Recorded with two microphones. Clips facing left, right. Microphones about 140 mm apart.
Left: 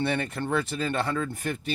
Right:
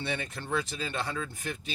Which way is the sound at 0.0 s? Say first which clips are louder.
Left 8 dB; 55° left (ahead or behind).